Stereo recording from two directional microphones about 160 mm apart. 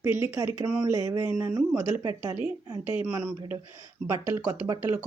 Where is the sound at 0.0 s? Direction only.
15° right (ahead or behind).